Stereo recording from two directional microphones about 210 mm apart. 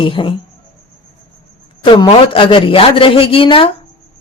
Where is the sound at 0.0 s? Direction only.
25° left (ahead or behind).